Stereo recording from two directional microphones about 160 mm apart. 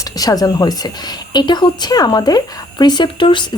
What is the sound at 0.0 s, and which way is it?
Speech, 25° left (ahead or behind).